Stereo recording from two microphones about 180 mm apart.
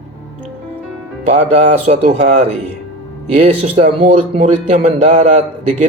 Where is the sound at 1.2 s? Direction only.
40° right (ahead or behind).